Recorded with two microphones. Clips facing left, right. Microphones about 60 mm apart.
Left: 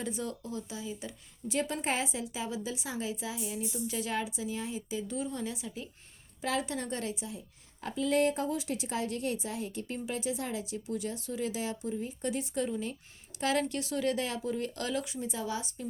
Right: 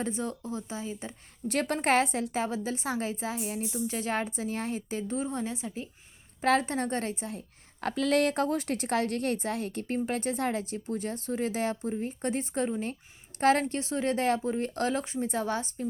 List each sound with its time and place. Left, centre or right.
0.0 s speech: right
1.5 s a woman's voice: right
6.4 s a woman's voice: right